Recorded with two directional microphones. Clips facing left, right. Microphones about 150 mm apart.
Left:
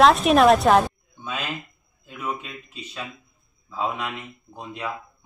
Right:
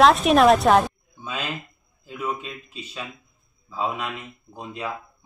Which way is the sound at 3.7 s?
5° right (ahead or behind).